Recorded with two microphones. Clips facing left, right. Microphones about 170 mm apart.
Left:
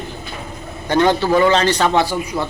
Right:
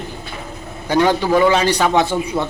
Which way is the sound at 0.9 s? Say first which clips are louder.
Even; 10° right (ahead or behind).